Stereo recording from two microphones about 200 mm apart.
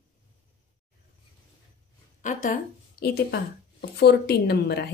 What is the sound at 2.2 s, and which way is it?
A woman's voice, 45° left (ahead or behind).